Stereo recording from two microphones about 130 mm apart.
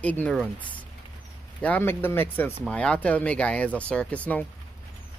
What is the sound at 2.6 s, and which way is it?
Speech, 5° left (ahead or behind).